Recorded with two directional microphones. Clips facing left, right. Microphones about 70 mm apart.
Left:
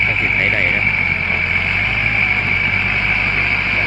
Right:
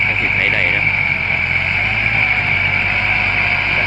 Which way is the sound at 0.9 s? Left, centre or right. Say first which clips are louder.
Even; centre.